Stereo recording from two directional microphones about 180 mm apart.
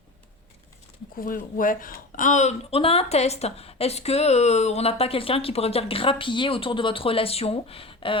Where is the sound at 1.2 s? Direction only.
50° left (ahead or behind).